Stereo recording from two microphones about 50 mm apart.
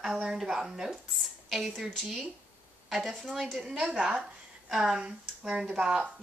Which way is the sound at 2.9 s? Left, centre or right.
Centre.